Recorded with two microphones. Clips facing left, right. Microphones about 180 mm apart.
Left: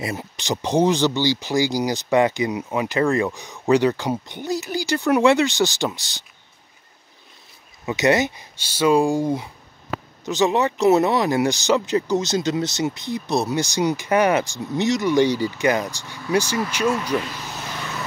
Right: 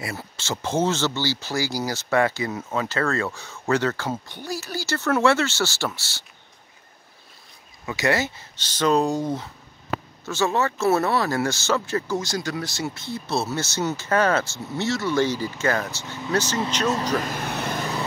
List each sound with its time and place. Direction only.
0.0 s speech: 15° left (ahead or behind)
7.8 s speech: 20° left (ahead or behind)
17.2 s vehicle: 50° right (ahead or behind)